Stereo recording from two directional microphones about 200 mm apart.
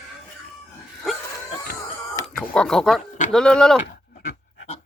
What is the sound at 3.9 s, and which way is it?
Pant, 50° left (ahead or behind).